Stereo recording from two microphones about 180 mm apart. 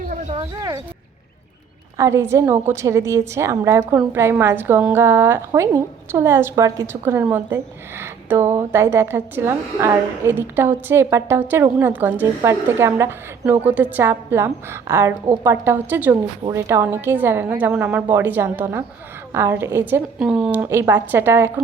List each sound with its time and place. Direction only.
0.3 s speech: 20° right (ahead or behind)
2.0 s a woman's voice: 15° right (ahead or behind)